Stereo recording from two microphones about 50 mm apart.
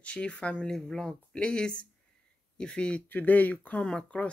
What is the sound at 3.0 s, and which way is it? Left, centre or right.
Speech, left.